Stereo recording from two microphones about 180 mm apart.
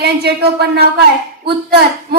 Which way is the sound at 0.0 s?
65° right (ahead or behind).